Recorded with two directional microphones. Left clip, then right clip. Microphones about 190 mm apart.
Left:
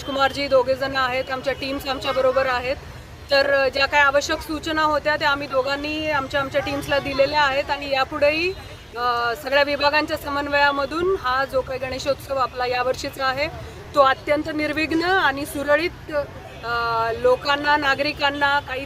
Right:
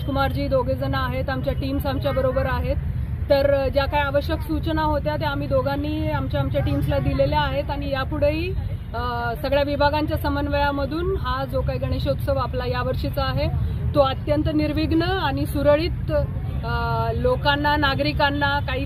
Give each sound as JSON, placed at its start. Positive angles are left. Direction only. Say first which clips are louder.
{"t": 0.3, "sound": "speech", "louder": "left 4 dB", "side_deg": 15}
{"t": 0.8, "sound": "speech", "louder": "left 4 dB", "side_deg": 50}
{"t": 1.1, "sound": "speech", "louder": "left 3 dB", "side_deg": 15}
{"t": 2.0, "sound": "speech", "louder": "left 2 dB", "side_deg": 50}
{"t": 2.3, "sound": "speech", "louder": "left 4 dB", "side_deg": 15}